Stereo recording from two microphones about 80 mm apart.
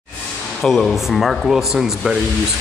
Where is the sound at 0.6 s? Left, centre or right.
Centre.